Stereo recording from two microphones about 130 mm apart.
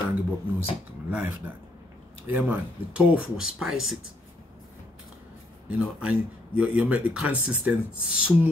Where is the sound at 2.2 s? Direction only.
15° right (ahead or behind).